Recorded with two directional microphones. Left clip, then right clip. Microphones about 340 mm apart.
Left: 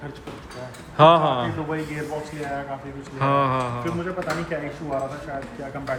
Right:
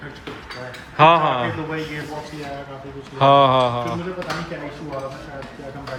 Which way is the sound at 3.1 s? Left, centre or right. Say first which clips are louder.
Right 8 dB; centre.